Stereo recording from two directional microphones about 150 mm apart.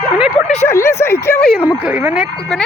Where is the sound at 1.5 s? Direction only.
10° right (ahead or behind).